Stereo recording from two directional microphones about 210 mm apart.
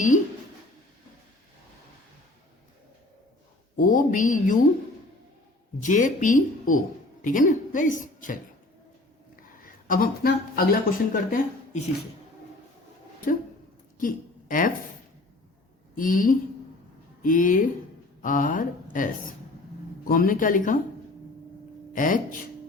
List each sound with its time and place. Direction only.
3.8 s a woman's voice: 40° left (ahead or behind)
5.8 s a woman's voice: 35° left (ahead or behind)
9.6 s speech: 40° left (ahead or behind)
14.0 s a sound: 40° left (ahead or behind)
16.0 s a woman's voice: 40° left (ahead or behind)
21.9 s a woman's voice: 40° left (ahead or behind)